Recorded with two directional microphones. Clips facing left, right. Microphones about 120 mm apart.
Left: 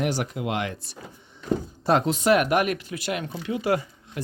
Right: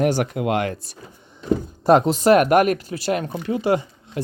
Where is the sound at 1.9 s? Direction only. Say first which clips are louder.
Right 6 dB; 45° right (ahead or behind).